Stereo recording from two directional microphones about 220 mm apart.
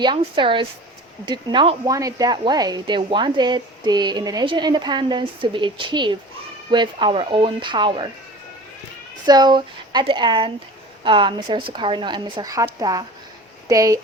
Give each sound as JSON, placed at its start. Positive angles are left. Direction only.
{"t": 0.0, "sound": "a woman's voice", "side_deg": -20}
{"t": 9.2, "sound": "a woman's voice", "side_deg": -20}